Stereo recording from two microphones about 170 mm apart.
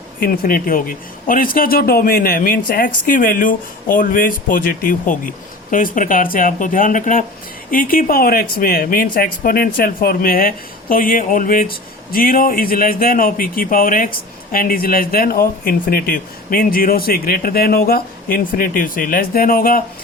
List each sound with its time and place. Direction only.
0.2 s speech: 60° left (ahead or behind)